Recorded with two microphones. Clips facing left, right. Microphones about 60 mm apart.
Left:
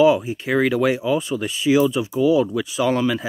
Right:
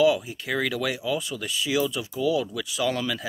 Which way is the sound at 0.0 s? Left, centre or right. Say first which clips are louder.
Left 5 dB; left.